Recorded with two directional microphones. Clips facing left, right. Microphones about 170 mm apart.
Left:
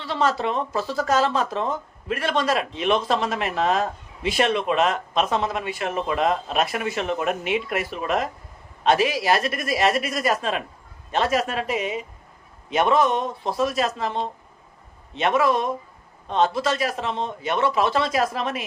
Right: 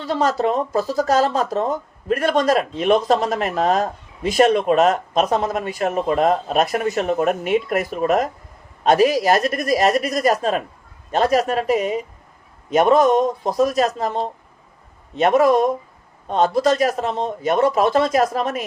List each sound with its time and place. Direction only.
0.0 s a man's voice: 40° right (ahead or behind)